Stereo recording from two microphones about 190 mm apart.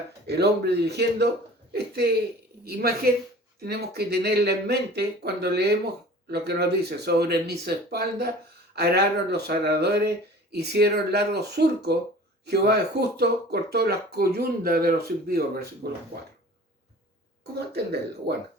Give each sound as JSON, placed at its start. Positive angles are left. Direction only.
{"t": 0.3, "sound": "speech", "side_deg": -60}
{"t": 18.3, "sound": "speech", "side_deg": -60}